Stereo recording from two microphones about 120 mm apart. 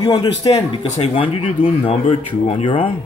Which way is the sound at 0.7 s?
45° left (ahead or behind).